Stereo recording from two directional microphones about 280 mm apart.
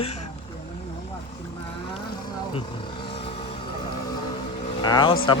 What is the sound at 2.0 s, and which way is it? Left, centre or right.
Vehicle, centre.